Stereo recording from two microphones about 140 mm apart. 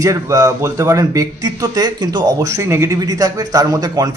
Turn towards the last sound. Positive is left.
turn(degrees=-25)  # may be behind; listen again after turning